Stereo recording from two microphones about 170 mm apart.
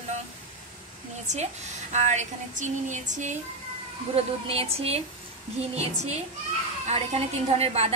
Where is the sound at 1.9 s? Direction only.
45° right (ahead or behind).